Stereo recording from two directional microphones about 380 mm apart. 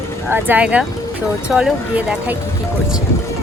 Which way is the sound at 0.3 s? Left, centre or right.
Centre.